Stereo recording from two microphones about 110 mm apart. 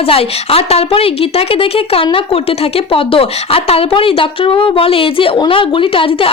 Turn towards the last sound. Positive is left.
turn(degrees=55)  # may be behind; listen again after turning